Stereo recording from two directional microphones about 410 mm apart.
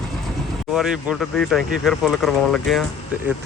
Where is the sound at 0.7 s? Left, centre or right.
Centre.